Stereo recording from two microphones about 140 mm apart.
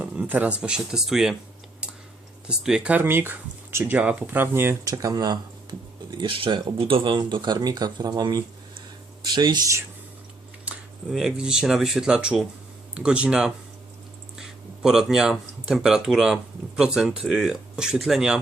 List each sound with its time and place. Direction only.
0.0 s speech: 10° right (ahead or behind)
2.5 s speech: 5° right (ahead or behind); by 9.7 s 30° right (ahead or behind)
10.7 s speech: centre (ahead or behind)